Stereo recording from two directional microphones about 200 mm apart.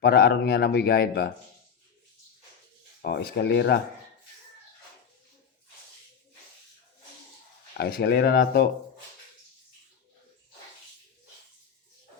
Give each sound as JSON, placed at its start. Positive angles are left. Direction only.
{"t": 0.0, "sound": "speech", "side_deg": 50}
{"t": 3.0, "sound": "speech", "side_deg": 55}
{"t": 7.7, "sound": "speech", "side_deg": 45}